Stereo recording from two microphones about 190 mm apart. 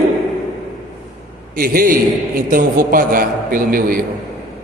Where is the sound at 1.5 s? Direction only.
50° right (ahead or behind).